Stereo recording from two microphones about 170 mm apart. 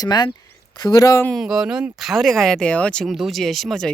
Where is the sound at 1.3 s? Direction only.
Centre (ahead or behind).